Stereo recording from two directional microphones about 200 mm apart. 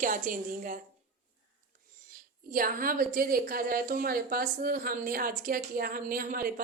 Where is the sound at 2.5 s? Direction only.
45° right (ahead or behind).